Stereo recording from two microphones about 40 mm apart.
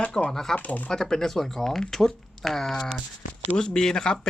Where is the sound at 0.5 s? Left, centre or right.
Left.